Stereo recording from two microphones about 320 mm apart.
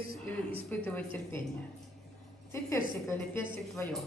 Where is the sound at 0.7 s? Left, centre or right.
Centre.